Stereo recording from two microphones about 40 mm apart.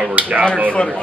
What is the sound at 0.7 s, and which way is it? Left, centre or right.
Speech, left.